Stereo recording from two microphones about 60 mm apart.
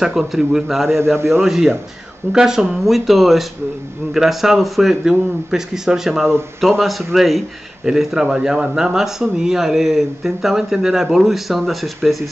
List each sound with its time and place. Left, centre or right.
0.0 s a man's voice: centre
0.9 s a man's voice: right
1.4 s a man's voice: centre